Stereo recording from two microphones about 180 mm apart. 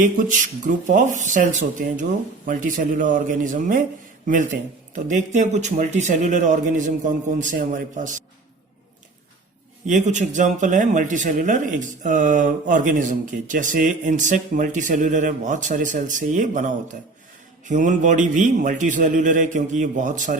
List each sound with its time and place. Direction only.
0.0 s speech: 45° right (ahead or behind)
4.9 s speech: 45° right (ahead or behind)
9.8 s speech: 40° right (ahead or behind)